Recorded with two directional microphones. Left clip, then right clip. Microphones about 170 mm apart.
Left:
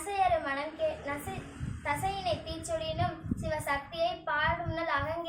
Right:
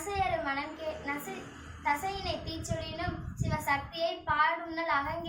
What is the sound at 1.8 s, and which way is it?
A child's voice, 20° left (ahead or behind).